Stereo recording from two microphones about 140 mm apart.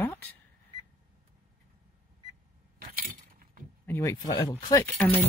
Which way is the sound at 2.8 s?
80° right.